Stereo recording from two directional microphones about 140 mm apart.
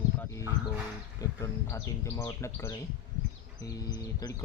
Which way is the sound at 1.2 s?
25° left (ahead or behind).